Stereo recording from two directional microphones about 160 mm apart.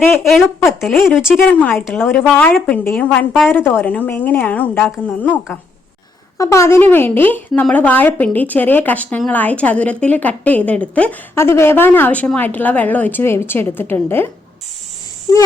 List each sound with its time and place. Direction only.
0.2 s a woman's voice: centre (ahead or behind)
1.5 s speech: 10° left (ahead or behind)
6.3 s speech: 20° left (ahead or behind)
15.3 s a child's voice: 20° left (ahead or behind)